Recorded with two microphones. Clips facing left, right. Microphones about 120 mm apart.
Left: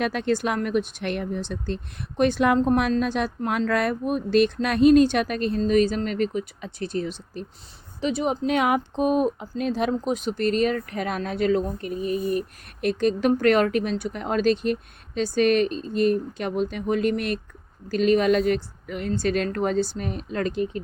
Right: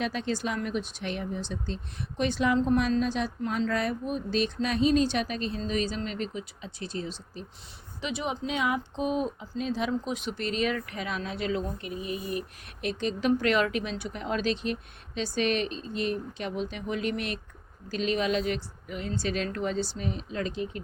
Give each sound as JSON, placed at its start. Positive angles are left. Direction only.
{"t": 0.0, "sound": "speech", "side_deg": 60}
{"t": 8.0, "sound": "speech", "side_deg": 40}
{"t": 8.5, "sound": "speech", "side_deg": 65}
{"t": 10.0, "sound": "speech", "side_deg": 40}